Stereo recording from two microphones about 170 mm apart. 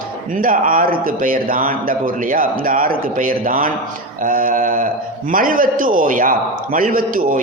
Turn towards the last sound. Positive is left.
turn(degrees=-55)  # may be behind; listen again after turning